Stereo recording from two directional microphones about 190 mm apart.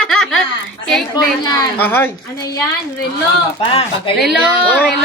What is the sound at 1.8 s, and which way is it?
Speech, 10° left (ahead or behind).